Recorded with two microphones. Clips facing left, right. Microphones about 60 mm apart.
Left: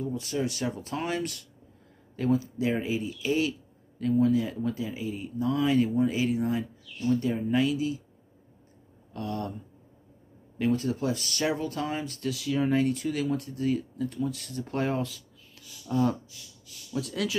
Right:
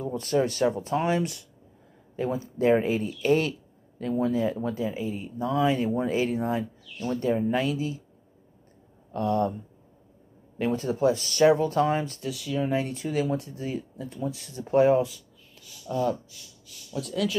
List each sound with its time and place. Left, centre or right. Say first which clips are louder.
0.0 s speech: right 5 dB; right
4.0 s speech: left 1 dB; right
9.1 s speech: right 8 dB; right
10.6 s speech: right 3 dB; right
12.3 s speech: left 4 dB; centre
12.7 s speech: left 1 dB; right
15.9 s speech: even; centre